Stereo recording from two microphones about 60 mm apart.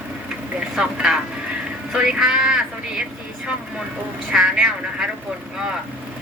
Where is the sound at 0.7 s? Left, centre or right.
Centre.